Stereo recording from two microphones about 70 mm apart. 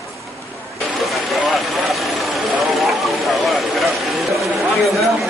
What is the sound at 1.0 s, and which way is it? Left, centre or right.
Vehicle, centre.